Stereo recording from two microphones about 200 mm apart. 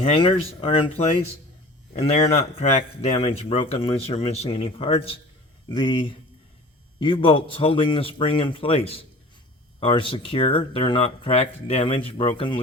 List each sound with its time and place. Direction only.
0.0 s speech: 30° left (ahead or behind)